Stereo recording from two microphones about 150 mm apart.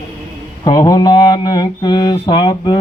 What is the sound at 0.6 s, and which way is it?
Mantra, 25° left (ahead or behind).